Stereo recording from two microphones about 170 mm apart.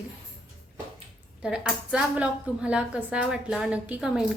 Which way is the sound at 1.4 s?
5° right (ahead or behind).